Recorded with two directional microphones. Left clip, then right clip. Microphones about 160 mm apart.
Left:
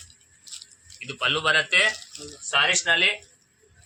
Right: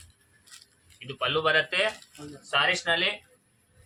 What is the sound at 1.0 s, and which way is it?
Speech, 20° right (ahead or behind).